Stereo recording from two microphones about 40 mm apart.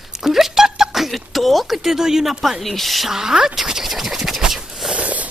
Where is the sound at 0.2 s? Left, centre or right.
Centre.